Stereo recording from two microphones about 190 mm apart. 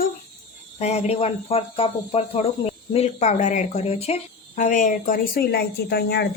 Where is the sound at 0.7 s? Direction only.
35° left (ahead or behind).